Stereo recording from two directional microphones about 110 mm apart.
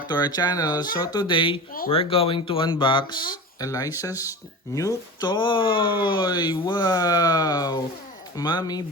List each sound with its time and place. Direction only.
0.1 s speech: 40° left (ahead or behind)